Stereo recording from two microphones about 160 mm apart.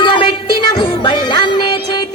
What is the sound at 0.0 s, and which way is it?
Music, 30° left (ahead or behind).